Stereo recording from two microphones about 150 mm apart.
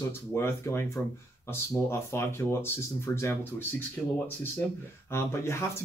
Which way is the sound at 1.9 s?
20° left (ahead or behind).